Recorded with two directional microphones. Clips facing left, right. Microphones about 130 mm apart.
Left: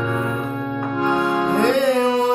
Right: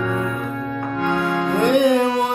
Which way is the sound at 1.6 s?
15° right (ahead or behind).